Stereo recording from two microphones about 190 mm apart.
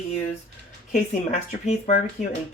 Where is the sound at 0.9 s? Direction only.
40° left (ahead or behind).